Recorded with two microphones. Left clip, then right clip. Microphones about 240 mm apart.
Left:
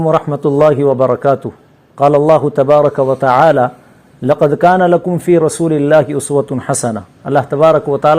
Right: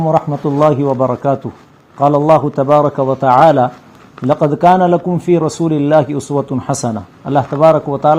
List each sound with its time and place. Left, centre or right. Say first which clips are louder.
0.0 s a man's voice: left 1 dB; left